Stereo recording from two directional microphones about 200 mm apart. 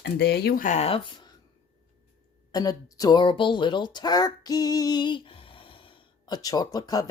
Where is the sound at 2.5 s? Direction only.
20° left (ahead or behind).